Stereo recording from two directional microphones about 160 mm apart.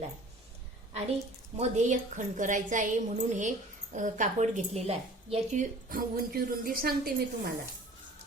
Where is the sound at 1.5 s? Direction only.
45° right (ahead or behind).